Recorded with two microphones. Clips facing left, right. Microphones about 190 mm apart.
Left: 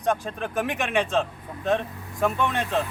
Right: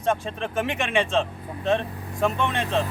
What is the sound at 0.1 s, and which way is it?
Speech, 5° left (ahead or behind).